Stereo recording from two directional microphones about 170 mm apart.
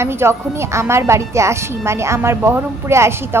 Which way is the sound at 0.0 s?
15° right (ahead or behind).